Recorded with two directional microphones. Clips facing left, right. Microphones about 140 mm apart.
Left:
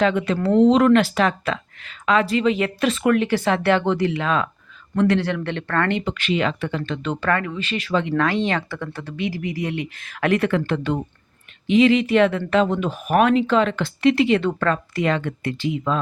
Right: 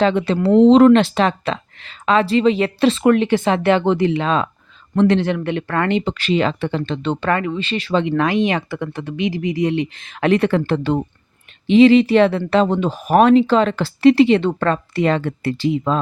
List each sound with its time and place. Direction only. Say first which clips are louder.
0.0 s speech: right 3 dB; 30° right (ahead or behind); by 6.0 s 15° right (ahead or behind)
6.1 s speech: right 4 dB; 35° right (ahead or behind)
8.0 s speech: right 4 dB; 20° right (ahead or behind)